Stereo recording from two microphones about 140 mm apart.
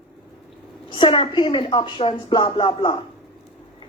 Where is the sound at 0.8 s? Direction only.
35° left (ahead or behind).